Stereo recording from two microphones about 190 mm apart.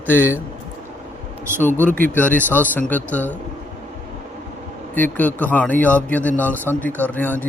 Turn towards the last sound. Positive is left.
turn(degrees=10)  # may be behind; listen again after turning